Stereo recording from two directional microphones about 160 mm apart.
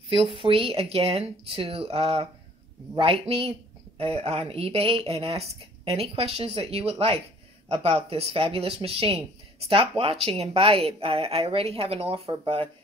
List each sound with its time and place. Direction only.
0.1 s speech: 35° right (ahead or behind)